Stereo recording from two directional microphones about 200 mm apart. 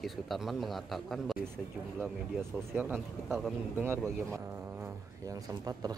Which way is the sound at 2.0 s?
10° right (ahead or behind).